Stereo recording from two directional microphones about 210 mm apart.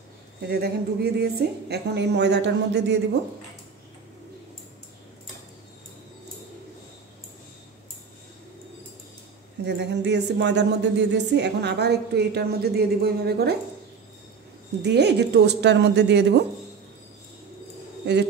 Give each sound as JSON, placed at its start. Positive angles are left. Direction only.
{"t": 0.5, "sound": "speech", "side_deg": -50}
{"t": 9.7, "sound": "speech", "side_deg": -55}
{"t": 14.8, "sound": "speech", "side_deg": -55}